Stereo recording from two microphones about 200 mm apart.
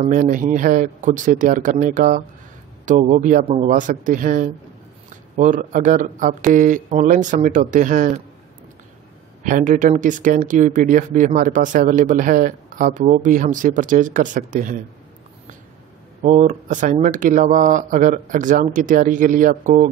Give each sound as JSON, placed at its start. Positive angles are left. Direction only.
{"t": 0.0, "sound": "speech", "side_deg": -40}
{"t": 9.4, "sound": "speech", "side_deg": -40}
{"t": 16.2, "sound": "speech", "side_deg": -35}